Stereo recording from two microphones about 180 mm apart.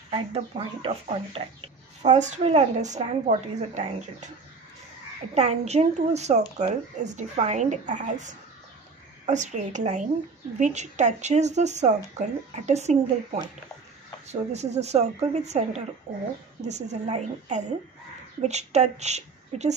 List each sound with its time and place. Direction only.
0.1 s speech: 30° right (ahead or behind)
5.3 s a woman's voice: 35° right (ahead or behind)